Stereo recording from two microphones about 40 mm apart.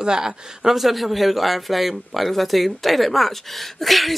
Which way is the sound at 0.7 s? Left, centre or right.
Centre.